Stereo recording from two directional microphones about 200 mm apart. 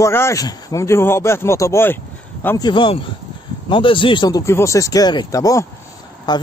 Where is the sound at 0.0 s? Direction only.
15° left (ahead or behind).